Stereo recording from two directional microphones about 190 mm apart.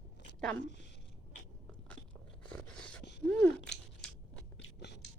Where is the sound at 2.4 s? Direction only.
5° left (ahead or behind).